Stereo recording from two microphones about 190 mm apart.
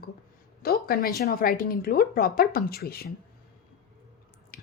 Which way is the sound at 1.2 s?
50° left (ahead or behind).